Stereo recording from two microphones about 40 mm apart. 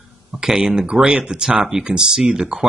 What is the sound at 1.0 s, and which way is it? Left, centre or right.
Speech, right.